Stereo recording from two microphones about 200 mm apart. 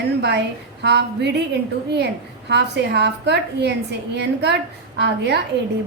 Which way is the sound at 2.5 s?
60° right (ahead or behind).